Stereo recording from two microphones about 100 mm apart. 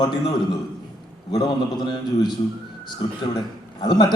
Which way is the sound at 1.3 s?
45° left (ahead or behind).